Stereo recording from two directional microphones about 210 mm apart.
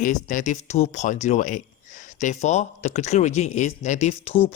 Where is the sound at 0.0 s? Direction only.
40° left (ahead or behind).